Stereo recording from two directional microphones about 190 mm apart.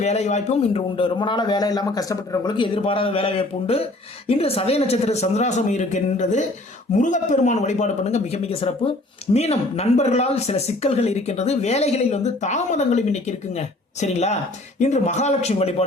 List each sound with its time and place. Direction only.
0.0 s a man's voice: 35° left (ahead or behind)